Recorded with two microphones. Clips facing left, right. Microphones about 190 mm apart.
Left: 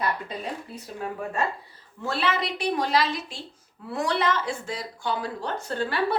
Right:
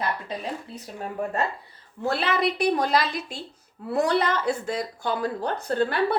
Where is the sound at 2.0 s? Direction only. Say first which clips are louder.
Right 2 dB; 55° right (ahead or behind).